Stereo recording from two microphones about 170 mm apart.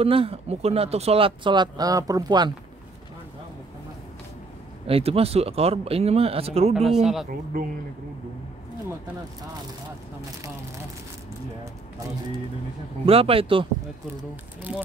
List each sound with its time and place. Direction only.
0.0 s speech: 35° right (ahead or behind)
4.8 s speech: 35° right (ahead or behind)
6.7 s speech: centre (ahead or behind)
13.0 s speech: 35° right (ahead or behind)